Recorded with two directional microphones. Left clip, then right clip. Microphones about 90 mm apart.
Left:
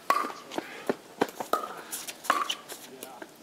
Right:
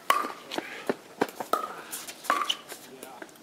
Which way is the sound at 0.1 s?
Centre (ahead or behind).